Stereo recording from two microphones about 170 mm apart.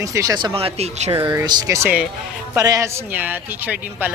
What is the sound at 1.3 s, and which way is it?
Speech, 25° right (ahead or behind).